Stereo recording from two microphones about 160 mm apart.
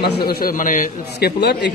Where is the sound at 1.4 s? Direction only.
90° left.